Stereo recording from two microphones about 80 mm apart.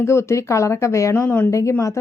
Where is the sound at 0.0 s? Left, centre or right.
Left.